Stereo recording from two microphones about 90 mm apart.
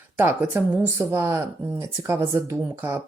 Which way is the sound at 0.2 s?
20° right (ahead or behind).